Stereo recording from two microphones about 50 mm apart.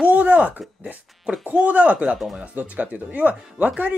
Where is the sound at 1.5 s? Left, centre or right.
Right.